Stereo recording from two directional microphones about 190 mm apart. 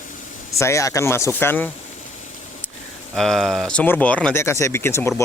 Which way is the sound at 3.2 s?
Centre (ahead or behind).